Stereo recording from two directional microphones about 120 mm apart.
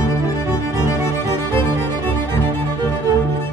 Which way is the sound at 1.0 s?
20° left (ahead or behind).